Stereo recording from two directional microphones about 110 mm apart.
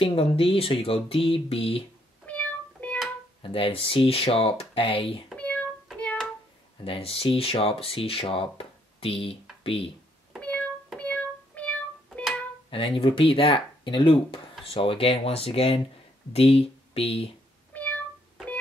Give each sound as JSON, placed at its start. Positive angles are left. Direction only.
{"t": 0.0, "sound": "speech", "side_deg": 60}
{"t": 2.2, "sound": "music", "side_deg": 15}
{"t": 3.4, "sound": "speech", "side_deg": 55}
{"t": 5.3, "sound": "a sound", "side_deg": 10}
{"t": 6.8, "sound": "speech", "side_deg": 60}
{"t": 9.6, "sound": "a sound", "side_deg": 55}
{"t": 10.4, "sound": "music", "side_deg": 15}
{"t": 11.0, "sound": "child singing", "side_deg": 15}
{"t": 12.6, "sound": "speech", "side_deg": 55}
{"t": 17.7, "sound": "music", "side_deg": 10}